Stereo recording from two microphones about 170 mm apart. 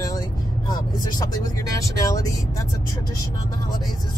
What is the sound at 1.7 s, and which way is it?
Speech, 20° left (ahead or behind).